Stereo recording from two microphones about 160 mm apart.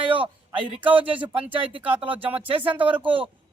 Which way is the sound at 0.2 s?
35° right (ahead or behind).